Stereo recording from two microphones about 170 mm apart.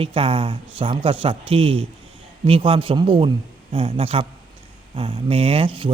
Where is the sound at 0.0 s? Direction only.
35° right (ahead or behind).